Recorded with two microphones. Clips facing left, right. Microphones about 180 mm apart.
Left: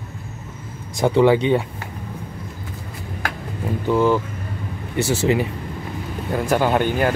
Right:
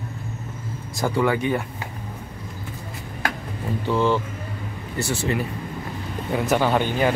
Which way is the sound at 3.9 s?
10° left (ahead or behind).